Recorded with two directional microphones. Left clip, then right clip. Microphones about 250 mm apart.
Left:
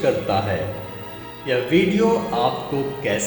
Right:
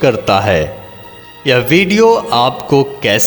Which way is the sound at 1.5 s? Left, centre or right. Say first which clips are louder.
Right 8 dB; right.